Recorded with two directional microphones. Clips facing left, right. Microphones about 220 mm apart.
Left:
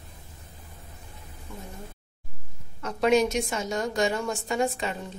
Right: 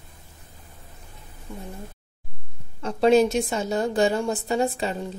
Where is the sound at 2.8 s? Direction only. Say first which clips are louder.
Right 4 dB; 30° right (ahead or behind).